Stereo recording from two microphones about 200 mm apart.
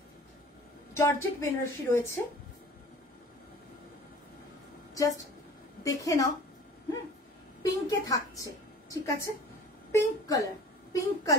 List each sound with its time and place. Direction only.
0.9 s a woman's voice: 10° left (ahead or behind)
4.9 s a woman's voice: 15° left (ahead or behind)
7.6 s a woman's voice: 20° left (ahead or behind)